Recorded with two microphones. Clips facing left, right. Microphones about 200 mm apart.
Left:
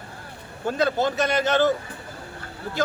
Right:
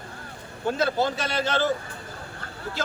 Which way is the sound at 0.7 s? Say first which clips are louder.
Left 2 dB; 20° left (ahead or behind).